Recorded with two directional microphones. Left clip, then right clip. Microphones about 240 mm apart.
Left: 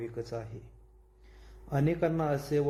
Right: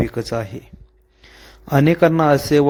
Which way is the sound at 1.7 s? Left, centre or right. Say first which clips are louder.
Right 15 dB; right.